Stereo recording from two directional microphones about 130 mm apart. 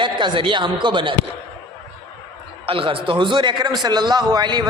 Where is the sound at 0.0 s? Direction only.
40° right (ahead or behind).